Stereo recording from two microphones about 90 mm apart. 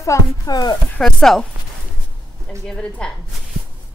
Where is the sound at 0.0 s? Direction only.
35° left (ahead or behind).